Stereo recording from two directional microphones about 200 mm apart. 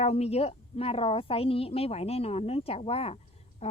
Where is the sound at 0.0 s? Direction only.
30° left (ahead or behind).